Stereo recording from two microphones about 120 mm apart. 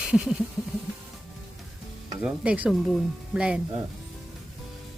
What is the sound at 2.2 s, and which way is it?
Stir, 10° right (ahead or behind).